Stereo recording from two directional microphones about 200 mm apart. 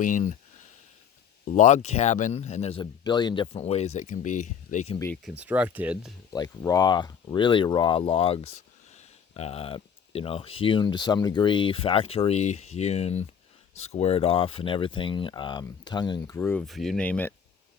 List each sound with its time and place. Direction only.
0.0 s a man's voice: 40° left (ahead or behind)
1.5 s a man's voice: 35° left (ahead or behind)
4.9 s speech: 10° left (ahead or behind)
5.2 s speech: 5° right (ahead or behind)
6.3 s speech: 20° left (ahead or behind)
16.4 s speech: 5° left (ahead or behind)